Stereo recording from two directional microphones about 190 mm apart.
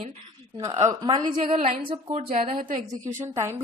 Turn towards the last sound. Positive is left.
turn(degrees=-15)  # may be behind; listen again after turning